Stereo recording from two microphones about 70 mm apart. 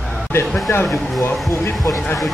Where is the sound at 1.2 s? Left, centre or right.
Left.